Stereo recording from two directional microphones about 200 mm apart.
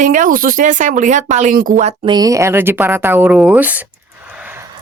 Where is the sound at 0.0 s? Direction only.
40° right (ahead or behind).